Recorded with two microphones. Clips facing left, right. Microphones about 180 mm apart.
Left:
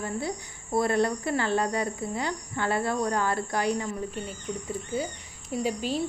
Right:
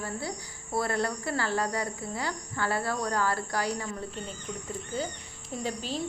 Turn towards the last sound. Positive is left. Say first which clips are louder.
# left 5 dB
turn(degrees=10)  # may be behind; listen again after turning